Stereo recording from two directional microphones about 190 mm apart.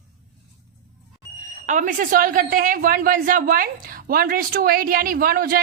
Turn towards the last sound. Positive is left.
turn(degrees=-50)  # may be behind; listen again after turning